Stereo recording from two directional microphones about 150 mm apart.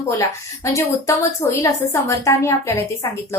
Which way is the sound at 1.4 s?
20° left (ahead or behind).